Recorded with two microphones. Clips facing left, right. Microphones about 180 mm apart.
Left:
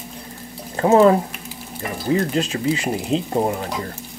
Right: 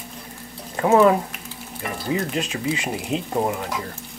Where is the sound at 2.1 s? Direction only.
35° left (ahead or behind).